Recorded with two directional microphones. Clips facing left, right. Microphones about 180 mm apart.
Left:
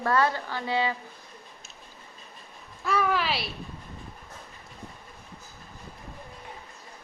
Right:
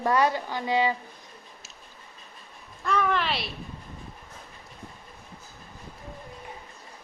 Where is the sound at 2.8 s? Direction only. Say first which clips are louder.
Even; 5° left (ahead or behind).